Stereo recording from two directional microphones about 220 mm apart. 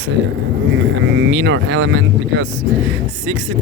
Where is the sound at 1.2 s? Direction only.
55° right (ahead or behind).